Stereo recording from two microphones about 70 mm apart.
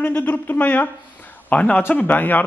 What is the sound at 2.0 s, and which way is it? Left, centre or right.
Speech, left.